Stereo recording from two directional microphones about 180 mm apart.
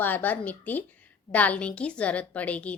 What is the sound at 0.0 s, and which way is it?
A woman's voice, 10° left (ahead or behind).